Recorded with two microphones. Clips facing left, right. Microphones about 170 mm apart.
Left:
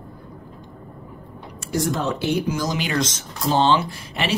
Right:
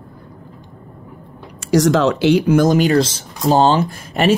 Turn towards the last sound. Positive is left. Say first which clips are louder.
# right 10 dB
turn(degrees=-45)  # may be behind; listen again after turning